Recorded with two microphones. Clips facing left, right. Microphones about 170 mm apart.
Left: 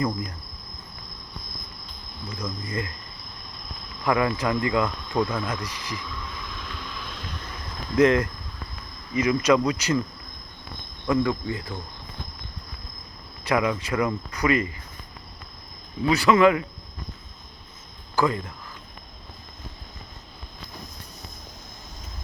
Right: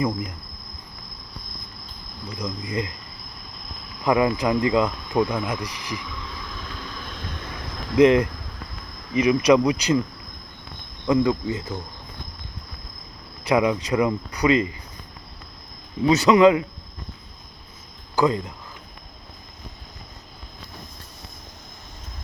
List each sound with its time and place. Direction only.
0.0 s speech: 10° right (ahead or behind)
2.4 s speech: 15° right (ahead or behind)
4.0 s speech: 20° right (ahead or behind)
7.9 s speech: 15° right (ahead or behind)
11.0 s speech: 20° right (ahead or behind)
13.4 s speech: 15° right (ahead or behind)
16.0 s speech: 20° right (ahead or behind)
18.2 s speech: 20° right (ahead or behind)